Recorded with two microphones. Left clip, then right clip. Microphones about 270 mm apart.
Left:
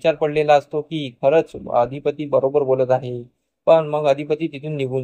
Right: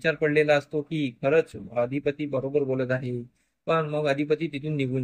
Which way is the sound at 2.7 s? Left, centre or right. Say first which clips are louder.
Left 10 dB; left.